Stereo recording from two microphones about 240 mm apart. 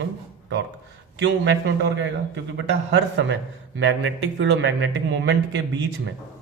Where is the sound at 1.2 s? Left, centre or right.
Right.